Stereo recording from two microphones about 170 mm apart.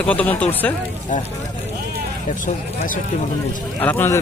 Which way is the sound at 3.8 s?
10° left (ahead or behind).